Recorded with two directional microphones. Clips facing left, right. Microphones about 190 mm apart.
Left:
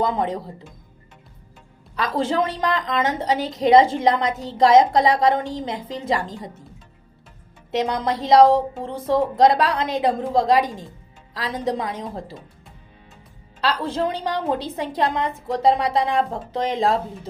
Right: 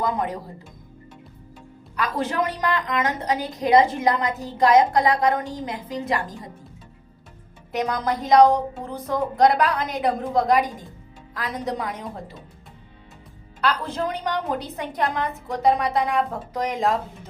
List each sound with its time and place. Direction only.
0.0 s a woman's voice: 25° left (ahead or behind)
2.0 s a woman's voice: 25° left (ahead or behind)
7.7 s a woman's voice: 25° left (ahead or behind)
13.6 s a woman's voice: 30° left (ahead or behind)